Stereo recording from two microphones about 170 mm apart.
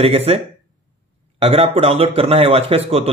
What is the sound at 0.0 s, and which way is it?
Speech, 35° right (ahead or behind).